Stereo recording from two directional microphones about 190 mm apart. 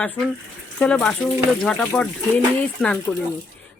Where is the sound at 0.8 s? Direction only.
5° left (ahead or behind).